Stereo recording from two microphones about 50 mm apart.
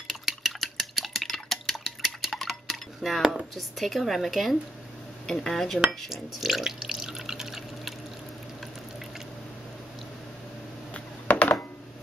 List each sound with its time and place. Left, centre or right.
0.1 s a sound: centre
3.2 s speech: centre
6.0 s drip: centre
11.3 s computer keyboard: left